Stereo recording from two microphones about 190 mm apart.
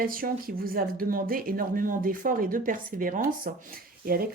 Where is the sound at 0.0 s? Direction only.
50° right (ahead or behind).